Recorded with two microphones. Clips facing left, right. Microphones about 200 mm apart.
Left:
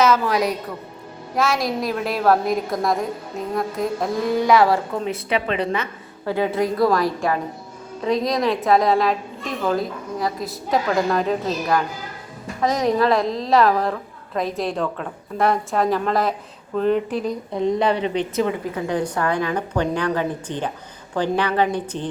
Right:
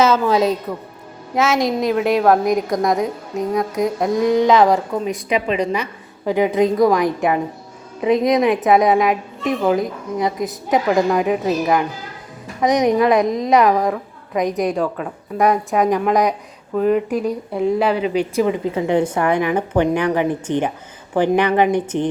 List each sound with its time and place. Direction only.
0.0 s a woman's voice: 25° right (ahead or behind)
3.5 s a woman's voice: 15° right (ahead or behind)
14.8 s speech: 5° right (ahead or behind)
15.4 s a woman's voice: 15° right (ahead or behind)